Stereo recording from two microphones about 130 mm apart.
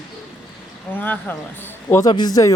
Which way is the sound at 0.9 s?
15° left (ahead or behind).